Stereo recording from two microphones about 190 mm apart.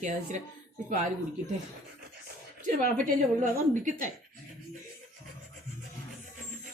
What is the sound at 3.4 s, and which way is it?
Speech, 45° right (ahead or behind).